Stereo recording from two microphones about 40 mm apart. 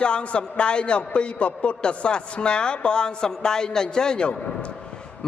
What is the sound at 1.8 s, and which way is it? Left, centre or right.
A man's voice, left.